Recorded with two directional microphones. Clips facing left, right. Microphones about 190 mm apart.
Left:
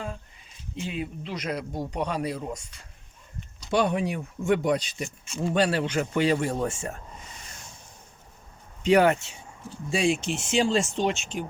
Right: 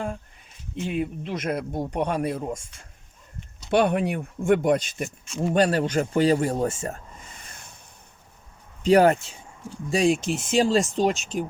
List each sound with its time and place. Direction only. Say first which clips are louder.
0.8 s speech: right 5 dB; 55° right (ahead or behind)
7.3 s a sound: even; 55° right (ahead or behind)
8.8 s speech: right 3 dB; 40° right (ahead or behind)